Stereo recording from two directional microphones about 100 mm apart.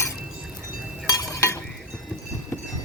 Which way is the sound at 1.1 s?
35° left (ahead or behind).